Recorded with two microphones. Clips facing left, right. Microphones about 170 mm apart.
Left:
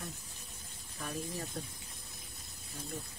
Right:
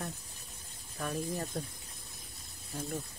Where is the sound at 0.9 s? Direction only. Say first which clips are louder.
Right 5 dB; 45° right (ahead or behind).